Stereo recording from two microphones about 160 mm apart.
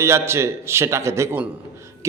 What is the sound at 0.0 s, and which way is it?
A man's voice, 15° right (ahead or behind).